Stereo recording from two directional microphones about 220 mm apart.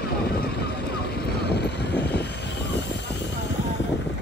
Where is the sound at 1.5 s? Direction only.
50° left (ahead or behind).